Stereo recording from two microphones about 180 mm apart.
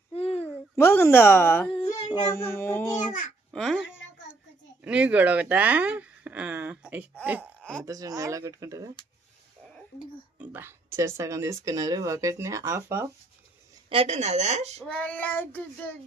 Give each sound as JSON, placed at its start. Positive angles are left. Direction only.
{"t": 0.1, "sound": "a sound", "side_deg": 35}
{"t": 0.4, "sound": "a child's voice", "side_deg": 10}
{"t": 3.5, "sound": "a child's voice", "side_deg": 0}
{"t": 4.8, "sound": "speech", "side_deg": -5}
{"t": 7.6, "sound": "a sound", "side_deg": 5}
{"t": 7.9, "sound": "speech", "side_deg": -20}
{"t": 10.3, "sound": "speech", "side_deg": -10}
{"t": 13.9, "sound": "speech", "side_deg": -35}
{"t": 14.8, "sound": "child singing", "side_deg": 10}